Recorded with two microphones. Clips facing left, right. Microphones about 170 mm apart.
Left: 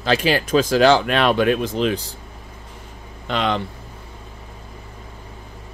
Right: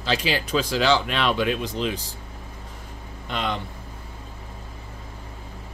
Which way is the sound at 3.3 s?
90° left.